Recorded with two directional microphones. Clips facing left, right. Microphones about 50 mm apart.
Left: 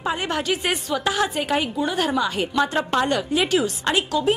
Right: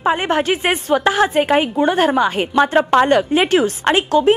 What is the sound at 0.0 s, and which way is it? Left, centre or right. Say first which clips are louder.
A woman's voice: right 8 dB; right.